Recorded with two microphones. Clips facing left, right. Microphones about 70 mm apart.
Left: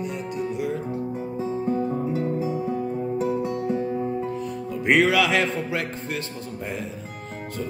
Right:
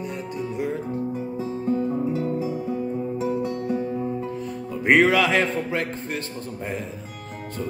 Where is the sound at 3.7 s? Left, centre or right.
Centre.